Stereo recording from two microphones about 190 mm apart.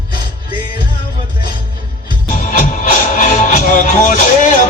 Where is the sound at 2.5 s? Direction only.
45° left (ahead or behind).